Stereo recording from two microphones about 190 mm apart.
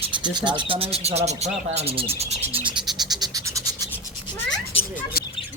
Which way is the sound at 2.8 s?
Centre (ahead or behind).